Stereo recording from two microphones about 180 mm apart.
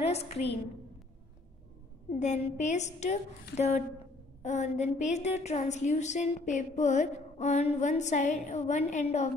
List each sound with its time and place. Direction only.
0.0 s a woman's voice: 35° left (ahead or behind)
2.0 s a woman's voice: 40° left (ahead or behind)